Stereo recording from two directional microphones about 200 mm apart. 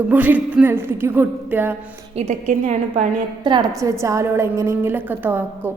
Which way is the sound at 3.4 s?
20° right (ahead or behind).